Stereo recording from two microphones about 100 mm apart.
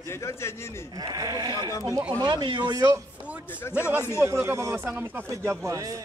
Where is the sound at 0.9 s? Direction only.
40° right (ahead or behind).